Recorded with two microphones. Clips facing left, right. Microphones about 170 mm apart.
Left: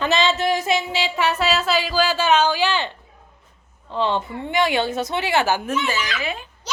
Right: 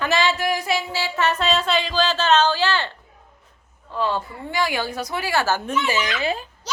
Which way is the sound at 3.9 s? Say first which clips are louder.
Left 2 dB; 25° left (ahead or behind).